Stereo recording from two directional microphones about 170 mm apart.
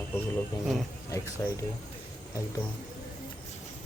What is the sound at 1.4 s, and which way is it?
Speech, 15° left (ahead or behind).